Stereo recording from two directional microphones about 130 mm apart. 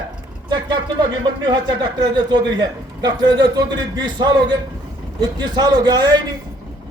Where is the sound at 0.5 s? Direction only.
35° right (ahead or behind).